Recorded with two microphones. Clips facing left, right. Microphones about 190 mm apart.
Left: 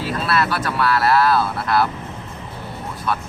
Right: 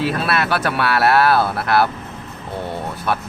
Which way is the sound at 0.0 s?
65° right (ahead or behind).